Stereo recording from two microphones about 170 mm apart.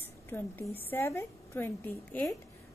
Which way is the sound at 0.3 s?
10° left (ahead or behind).